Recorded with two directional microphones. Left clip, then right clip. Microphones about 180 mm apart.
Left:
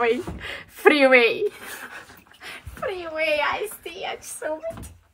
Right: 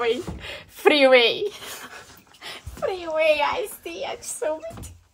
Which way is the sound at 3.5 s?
70° right (ahead or behind).